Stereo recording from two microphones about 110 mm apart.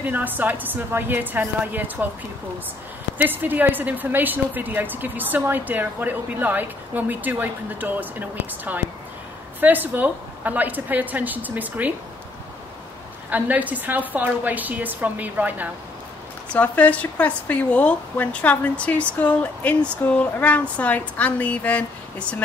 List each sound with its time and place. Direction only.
0.0 s a woman's voice: 15° right (ahead or behind)
3.2 s a woman's voice: 15° right (ahead or behind)
13.3 s a woman's voice: 15° right (ahead or behind)
16.5 s a woman's voice: 15° left (ahead or behind)